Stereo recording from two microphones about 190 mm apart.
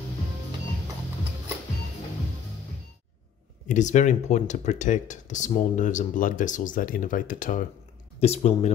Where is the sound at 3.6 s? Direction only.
40° left (ahead or behind).